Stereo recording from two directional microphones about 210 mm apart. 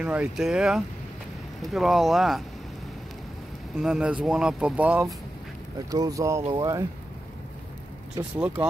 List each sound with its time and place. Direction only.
0.0 s speech: 5° right (ahead or behind)
3.8 s speech: 5° right (ahead or behind); by 6.8 s 20° right (ahead or behind)
8.2 s speech: 15° right (ahead or behind)